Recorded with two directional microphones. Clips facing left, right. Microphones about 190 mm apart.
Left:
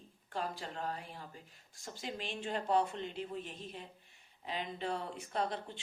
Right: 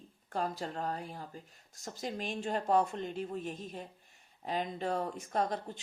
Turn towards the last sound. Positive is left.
turn(degrees=-45)  # may be behind; listen again after turning